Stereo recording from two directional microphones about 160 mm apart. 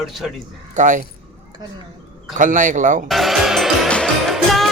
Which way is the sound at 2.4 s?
55° right (ahead or behind).